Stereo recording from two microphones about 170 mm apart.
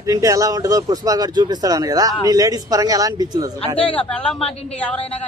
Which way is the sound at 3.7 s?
30° left (ahead or behind).